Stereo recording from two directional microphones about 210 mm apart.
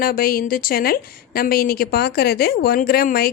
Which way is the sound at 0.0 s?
45° left (ahead or behind).